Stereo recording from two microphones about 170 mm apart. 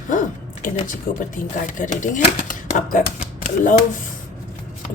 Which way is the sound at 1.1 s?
55° left (ahead or behind).